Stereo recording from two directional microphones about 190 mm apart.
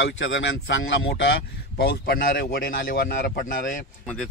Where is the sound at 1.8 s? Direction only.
55° left (ahead or behind).